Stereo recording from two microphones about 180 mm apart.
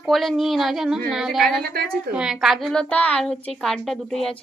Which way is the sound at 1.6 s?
60° right (ahead or behind).